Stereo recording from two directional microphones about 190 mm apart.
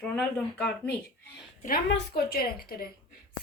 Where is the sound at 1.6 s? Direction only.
50° left (ahead or behind).